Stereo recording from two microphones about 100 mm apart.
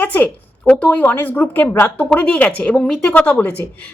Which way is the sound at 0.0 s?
15° left (ahead or behind).